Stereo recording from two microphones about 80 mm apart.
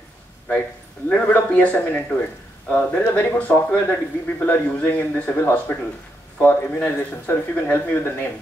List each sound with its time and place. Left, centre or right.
1.0 s a man's voice: left